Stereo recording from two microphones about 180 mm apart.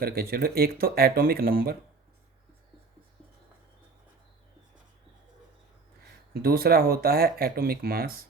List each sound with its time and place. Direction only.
0.0 s speech: 60° right (ahead or behind)
6.3 s speech: 60° right (ahead or behind)